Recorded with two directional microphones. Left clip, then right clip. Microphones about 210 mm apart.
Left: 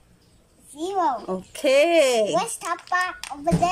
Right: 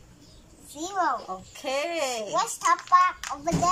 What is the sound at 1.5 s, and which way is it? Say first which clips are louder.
Speech: left 12 dB; 45° left (ahead or behind).